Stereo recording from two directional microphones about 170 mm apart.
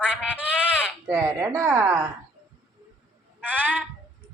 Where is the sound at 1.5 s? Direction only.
15° right (ahead or behind).